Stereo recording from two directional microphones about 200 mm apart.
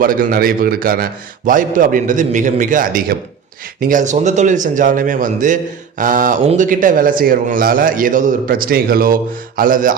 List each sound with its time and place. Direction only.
0.0 s a man's voice: 45° right (ahead or behind)